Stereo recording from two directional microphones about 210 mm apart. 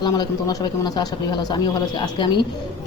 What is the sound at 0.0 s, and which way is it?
Speech, 20° left (ahead or behind).